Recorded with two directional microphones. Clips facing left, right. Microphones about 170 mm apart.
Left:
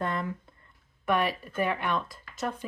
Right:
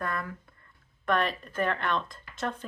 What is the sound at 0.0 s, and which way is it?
Speech, 25° left (ahead or behind).